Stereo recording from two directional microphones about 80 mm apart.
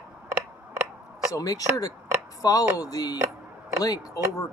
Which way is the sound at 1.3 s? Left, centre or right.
Left.